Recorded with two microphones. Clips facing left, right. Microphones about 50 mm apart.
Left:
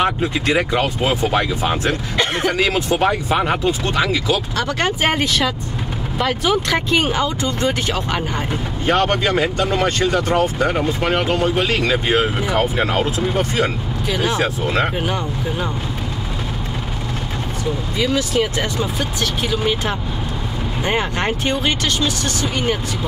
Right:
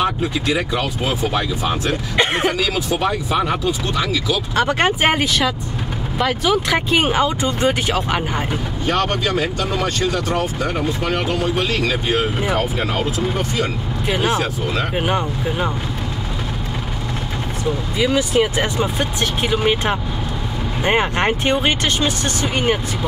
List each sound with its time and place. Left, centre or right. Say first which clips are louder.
0.0 s speech: left 1 dB; left
2.1 s speech: right 3 dB; centre
2.5 s speech: left 2 dB; left
3.1 s speech: left 1 dB; left
4.6 s speech: right 3 dB; right
6.1 s speech: even; centre
6.7 s speech: right 1 dB; centre
8.8 s speech: left 3 dB; left
14.0 s speech: even; right
17.9 s speech: right 2 dB; centre